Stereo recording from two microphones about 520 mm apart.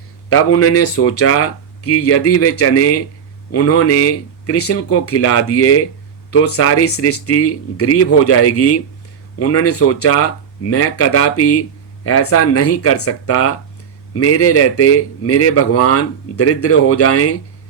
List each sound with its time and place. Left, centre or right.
0.3 s a man's voice: left